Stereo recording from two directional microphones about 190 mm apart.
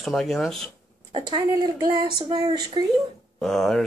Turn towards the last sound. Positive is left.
turn(degrees=5)  # may be behind; listen again after turning